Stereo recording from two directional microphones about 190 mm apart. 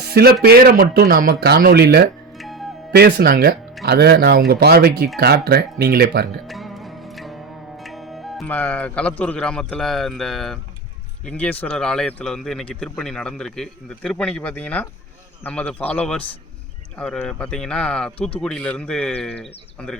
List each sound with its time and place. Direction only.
0.0 s a man's voice: 55° right (ahead or behind)
2.4 s music: centre (ahead or behind)
2.9 s speech: 60° right (ahead or behind)
6.5 s music: centre (ahead or behind)
7.9 s a man's voice: centre (ahead or behind)